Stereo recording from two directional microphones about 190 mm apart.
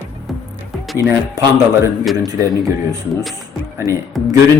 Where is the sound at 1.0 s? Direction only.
15° right (ahead or behind).